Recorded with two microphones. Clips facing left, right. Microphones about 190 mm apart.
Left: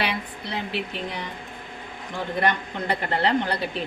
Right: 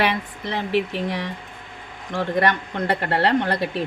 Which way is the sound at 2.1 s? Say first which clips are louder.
Right 4 dB; 75° right (ahead or behind).